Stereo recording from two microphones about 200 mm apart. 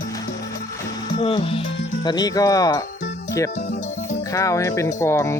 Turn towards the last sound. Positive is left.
turn(degrees=15)  # may be behind; listen again after turning